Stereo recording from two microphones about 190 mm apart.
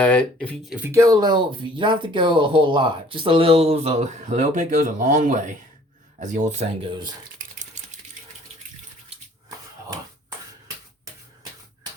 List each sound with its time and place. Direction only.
0.0 s speech: 10° left (ahead or behind)
0.9 s speech: 15° right (ahead or behind)
7.3 s stir: 40° right (ahead or behind)